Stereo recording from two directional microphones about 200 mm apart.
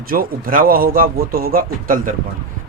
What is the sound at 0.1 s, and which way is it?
Speech, 45° right (ahead or behind).